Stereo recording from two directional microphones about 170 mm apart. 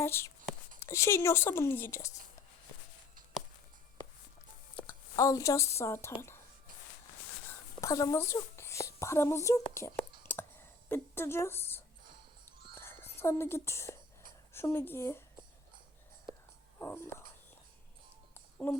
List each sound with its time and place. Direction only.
0.0 s speech: 15° left (ahead or behind)
5.1 s speech: 20° left (ahead or behind)
7.8 s a woman's voice: 20° left (ahead or behind)
9.9 s a sound: 10° left (ahead or behind)
12.8 s whispering: 15° left (ahead or behind)
14.5 s speech: 15° left (ahead or behind)
16.8 s speech: 15° left (ahead or behind)